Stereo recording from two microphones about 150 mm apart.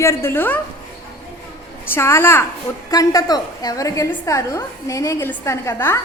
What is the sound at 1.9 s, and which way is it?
A woman's voice, 15° left (ahead or behind).